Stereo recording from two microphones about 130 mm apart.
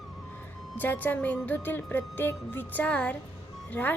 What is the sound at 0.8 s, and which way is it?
Speech, 15° left (ahead or behind).